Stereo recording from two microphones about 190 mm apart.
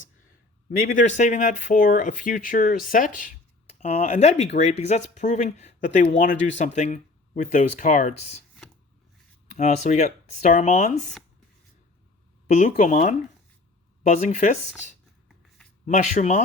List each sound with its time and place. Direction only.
0.8 s speech: 45° left (ahead or behind)
3.8 s speech: 35° left (ahead or behind)
9.5 s speech: 40° left (ahead or behind)
12.5 s speech: 40° left (ahead or behind)